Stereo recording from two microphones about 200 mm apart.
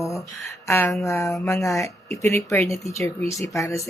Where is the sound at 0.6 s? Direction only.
10° left (ahead or behind).